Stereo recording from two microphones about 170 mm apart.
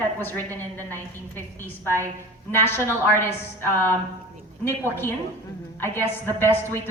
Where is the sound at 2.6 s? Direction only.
15° left (ahead or behind).